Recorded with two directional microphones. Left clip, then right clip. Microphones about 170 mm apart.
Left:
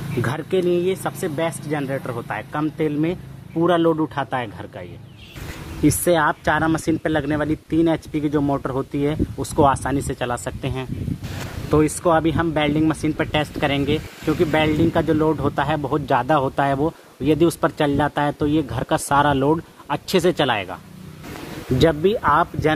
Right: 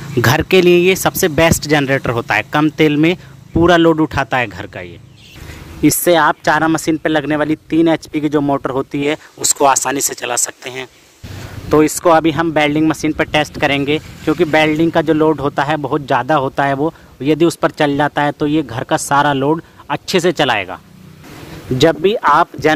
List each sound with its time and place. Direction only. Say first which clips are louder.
0.3 s speech: right 11 dB; 35° right (ahead or behind)
11.7 s speech: right 7 dB; 35° right (ahead or behind)